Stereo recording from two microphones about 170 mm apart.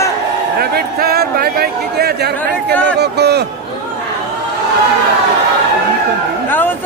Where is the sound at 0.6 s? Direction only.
65° right (ahead or behind).